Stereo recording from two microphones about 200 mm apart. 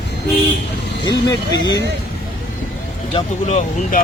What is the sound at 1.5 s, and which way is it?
Speech, 60° left (ahead or behind).